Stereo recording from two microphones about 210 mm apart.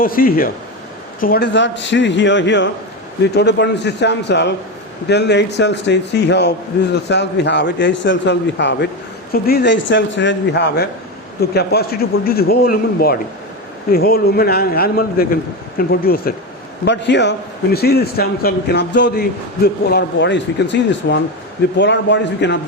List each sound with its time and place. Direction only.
0.0 s a man's voice: 45° left (ahead or behind)
16.8 s a man's voice: 55° left (ahead or behind)